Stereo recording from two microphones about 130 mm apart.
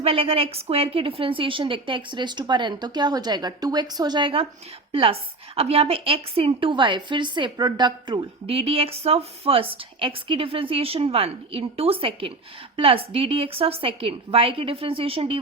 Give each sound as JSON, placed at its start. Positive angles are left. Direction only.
{"t": 0.0, "sound": "a woman's voice", "side_deg": -45}